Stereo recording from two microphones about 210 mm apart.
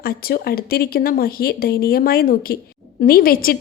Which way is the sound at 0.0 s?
45° left (ahead or behind).